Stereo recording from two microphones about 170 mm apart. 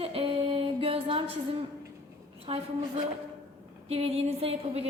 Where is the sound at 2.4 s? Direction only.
35° right (ahead or behind).